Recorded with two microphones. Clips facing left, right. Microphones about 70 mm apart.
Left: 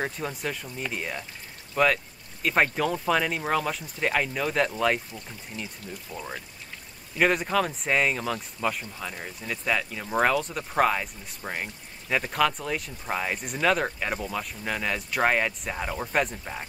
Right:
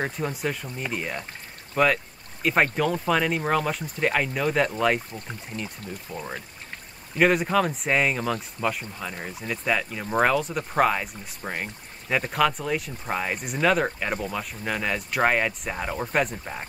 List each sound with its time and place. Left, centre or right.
0.0 s speech: centre
5.5 s speech: right
6.0 s speech: centre
7.2 s speech: centre